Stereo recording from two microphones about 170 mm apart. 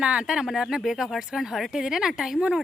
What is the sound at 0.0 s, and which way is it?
Speech, 5° right (ahead or behind).